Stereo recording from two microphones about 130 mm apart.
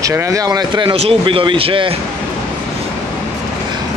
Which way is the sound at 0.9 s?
45° right (ahead or behind).